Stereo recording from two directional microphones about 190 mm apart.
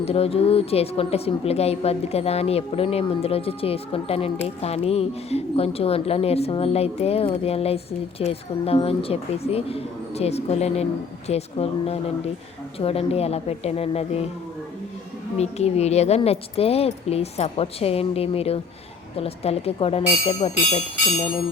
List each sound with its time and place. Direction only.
0.0 s speech: 30° left (ahead or behind)
15.4 s speech: 35° left (ahead or behind)